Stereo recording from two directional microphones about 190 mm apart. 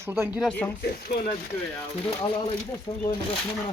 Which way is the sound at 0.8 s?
55° left (ahead or behind).